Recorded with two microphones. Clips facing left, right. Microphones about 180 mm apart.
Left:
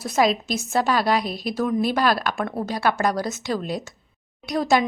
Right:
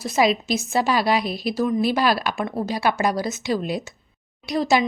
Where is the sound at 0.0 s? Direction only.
5° right (ahead or behind).